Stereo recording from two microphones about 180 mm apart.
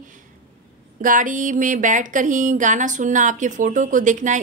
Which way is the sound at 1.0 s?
45° right (ahead or behind).